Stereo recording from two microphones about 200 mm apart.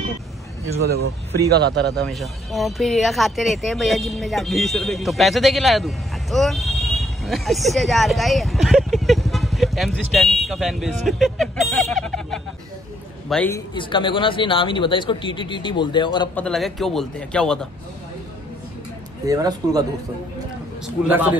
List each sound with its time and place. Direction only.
1.5 s speech: 55° right (ahead or behind)
2.0 s a man's voice: centre (ahead or behind)
13.7 s a man's voice: 25° left (ahead or behind)
16.3 s speech: 5° left (ahead or behind)
19.2 s a man's voice: 20° right (ahead or behind)
21.1 s a man's voice: 10° right (ahead or behind)